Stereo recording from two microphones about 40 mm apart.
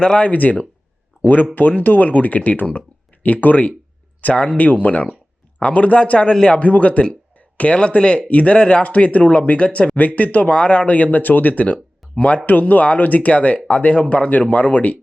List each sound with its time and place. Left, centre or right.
0.0 s speech: left
1.2 s speech: left
6.6 s speech: left
7.8 s speech: left
12.5 s speech: left